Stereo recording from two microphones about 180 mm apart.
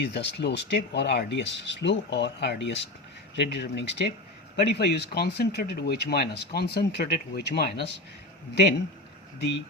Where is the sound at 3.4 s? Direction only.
70° left (ahead or behind).